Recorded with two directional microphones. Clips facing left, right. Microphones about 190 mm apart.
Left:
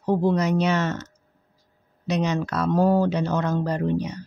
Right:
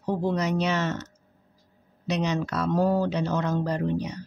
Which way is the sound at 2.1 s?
50° left (ahead or behind).